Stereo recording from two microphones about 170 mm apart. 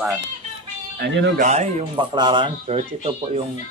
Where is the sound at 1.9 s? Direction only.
25° right (ahead or behind).